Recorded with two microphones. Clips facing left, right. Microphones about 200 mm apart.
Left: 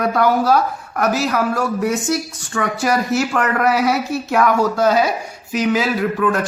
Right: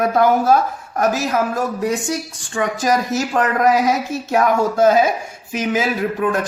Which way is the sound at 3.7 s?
20° right (ahead or behind).